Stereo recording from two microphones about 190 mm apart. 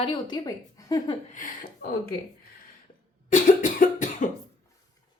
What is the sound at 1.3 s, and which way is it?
Speech, 45° left (ahead or behind).